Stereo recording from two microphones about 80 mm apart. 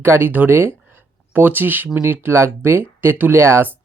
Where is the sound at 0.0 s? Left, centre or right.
Right.